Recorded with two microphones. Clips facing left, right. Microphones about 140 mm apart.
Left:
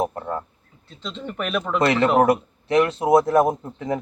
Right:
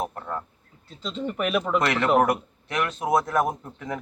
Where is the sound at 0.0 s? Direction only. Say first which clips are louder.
Left 5 dB; 25° left (ahead or behind).